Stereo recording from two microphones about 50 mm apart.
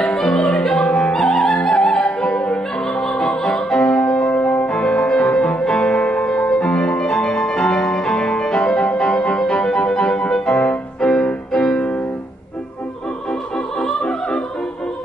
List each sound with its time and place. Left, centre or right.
0.0 s opera: centre
0.8 s music: centre
1.2 s music: centre
1.6 s opera: centre
3.8 s music: left
4.6 s music: centre
13.7 s music: centre